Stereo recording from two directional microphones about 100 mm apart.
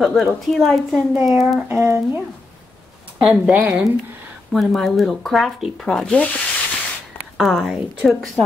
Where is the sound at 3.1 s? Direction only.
10° right (ahead or behind).